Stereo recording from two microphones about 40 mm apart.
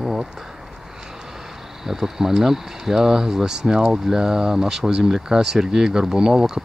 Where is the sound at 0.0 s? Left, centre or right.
Centre.